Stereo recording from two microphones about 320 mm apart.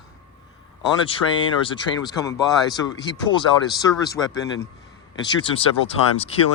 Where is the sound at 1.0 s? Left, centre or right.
Centre.